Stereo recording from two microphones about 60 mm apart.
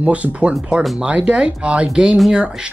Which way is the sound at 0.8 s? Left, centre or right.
Centre.